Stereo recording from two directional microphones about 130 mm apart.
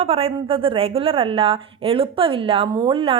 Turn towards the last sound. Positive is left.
turn(degrees=-45)  # may be behind; listen again after turning